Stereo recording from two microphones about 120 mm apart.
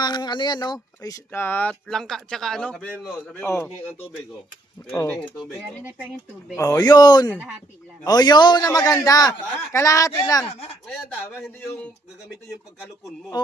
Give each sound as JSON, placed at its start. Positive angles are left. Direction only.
{"t": 0.0, "sound": "a man's voice", "side_deg": 35}
{"t": 1.3, "sound": "speech", "side_deg": 15}
{"t": 1.9, "sound": "speech", "side_deg": 5}
{"t": 3.4, "sound": "speech", "side_deg": 20}
{"t": 4.8, "sound": "speech", "side_deg": 25}
{"t": 6.6, "sound": "a man's voice", "side_deg": 30}
{"t": 13.4, "sound": "a man's voice", "side_deg": 35}